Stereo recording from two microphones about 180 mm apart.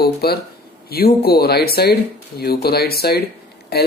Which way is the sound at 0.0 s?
60° left (ahead or behind).